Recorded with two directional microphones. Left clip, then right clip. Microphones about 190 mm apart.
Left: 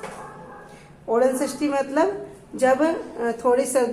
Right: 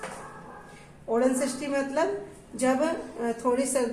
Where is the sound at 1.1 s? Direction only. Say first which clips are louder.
Left 5 dB; 30° left (ahead or behind).